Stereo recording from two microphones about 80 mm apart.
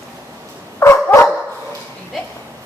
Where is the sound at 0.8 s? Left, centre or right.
Left.